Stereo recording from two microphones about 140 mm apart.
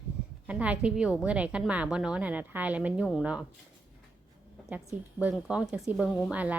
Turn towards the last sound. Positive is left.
turn(degrees=-10)  # may be behind; listen again after turning